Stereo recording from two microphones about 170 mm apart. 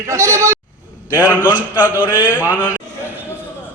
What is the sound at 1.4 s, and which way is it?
A man's voice, 10° right (ahead or behind).